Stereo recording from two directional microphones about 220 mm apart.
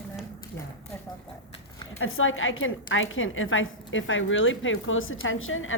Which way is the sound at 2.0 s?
65° left (ahead or behind).